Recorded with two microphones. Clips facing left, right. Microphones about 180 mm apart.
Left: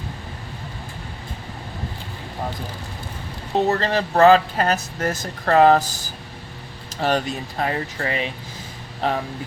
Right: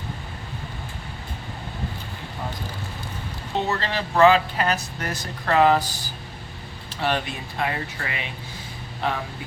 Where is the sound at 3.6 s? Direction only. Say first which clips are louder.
Left 6 dB; 40° left (ahead or behind).